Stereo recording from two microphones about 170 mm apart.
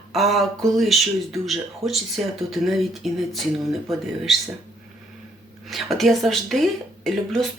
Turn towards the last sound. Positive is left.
turn(degrees=0)  # may be behind; listen again after turning